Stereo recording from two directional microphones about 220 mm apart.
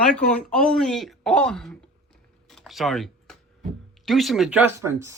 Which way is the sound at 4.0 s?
Centre (ahead or behind).